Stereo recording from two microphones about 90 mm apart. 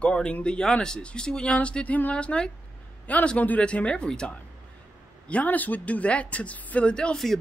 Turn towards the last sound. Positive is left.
turn(degrees=5)  # may be behind; listen again after turning